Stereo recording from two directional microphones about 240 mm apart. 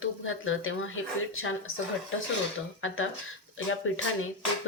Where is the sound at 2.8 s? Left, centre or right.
Left.